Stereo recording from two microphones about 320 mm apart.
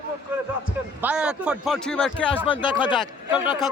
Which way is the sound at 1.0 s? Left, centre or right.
Centre.